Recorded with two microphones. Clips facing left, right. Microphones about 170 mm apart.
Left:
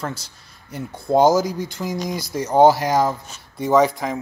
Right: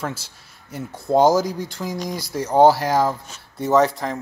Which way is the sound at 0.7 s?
5° right (ahead or behind).